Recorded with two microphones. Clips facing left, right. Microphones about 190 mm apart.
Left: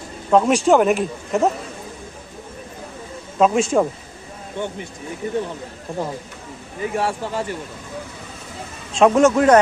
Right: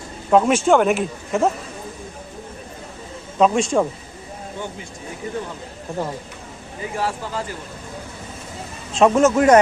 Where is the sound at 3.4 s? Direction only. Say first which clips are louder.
Left 1 dB; centre (ahead or behind).